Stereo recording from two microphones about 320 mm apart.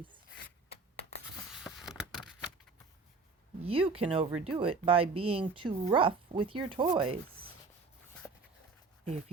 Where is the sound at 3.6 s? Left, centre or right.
Centre.